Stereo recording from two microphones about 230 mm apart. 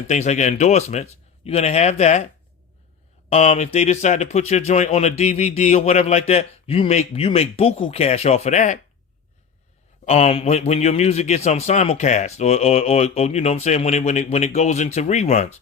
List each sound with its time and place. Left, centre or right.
0.1 s speech: left
3.2 s speech: left
10.1 s speech: left